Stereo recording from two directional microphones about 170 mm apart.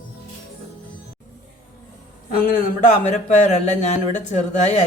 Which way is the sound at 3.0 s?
45° left (ahead or behind).